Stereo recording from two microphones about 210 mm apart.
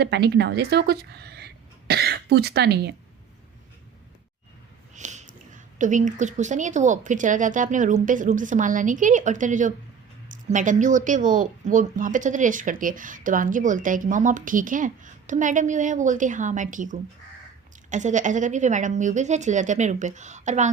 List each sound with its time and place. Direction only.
0.0 s a woman's voice: 50° right (ahead or behind)
4.9 s a sound: 35° right (ahead or behind)
5.8 s speech: 35° right (ahead or behind)